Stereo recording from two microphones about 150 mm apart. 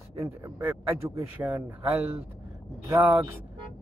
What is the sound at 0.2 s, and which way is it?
Speech, 15° right (ahead or behind).